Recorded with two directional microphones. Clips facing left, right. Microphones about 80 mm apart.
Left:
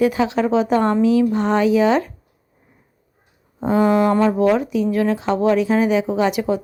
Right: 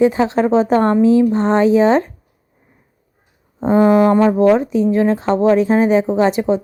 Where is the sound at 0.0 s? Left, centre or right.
Right.